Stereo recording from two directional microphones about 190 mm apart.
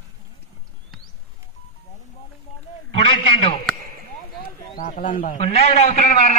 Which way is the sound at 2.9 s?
30° left (ahead or behind).